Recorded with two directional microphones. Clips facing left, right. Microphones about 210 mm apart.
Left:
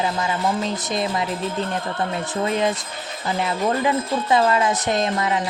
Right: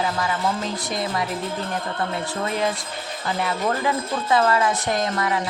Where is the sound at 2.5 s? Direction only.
20° left (ahead or behind).